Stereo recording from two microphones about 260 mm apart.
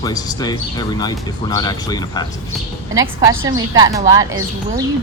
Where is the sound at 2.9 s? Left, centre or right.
Centre.